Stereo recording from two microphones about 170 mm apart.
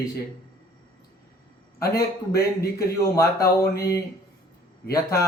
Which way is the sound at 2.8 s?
20° left (ahead or behind).